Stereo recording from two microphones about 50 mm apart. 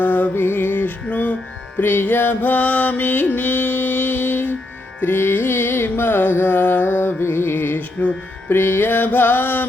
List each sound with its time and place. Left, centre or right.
0.0 s music: left
1.8 s music: left
4.9 s carnatic music: left